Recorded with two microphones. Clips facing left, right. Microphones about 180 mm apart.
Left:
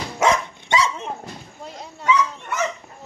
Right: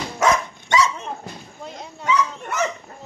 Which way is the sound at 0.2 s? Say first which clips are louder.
Even; 30° left (ahead or behind).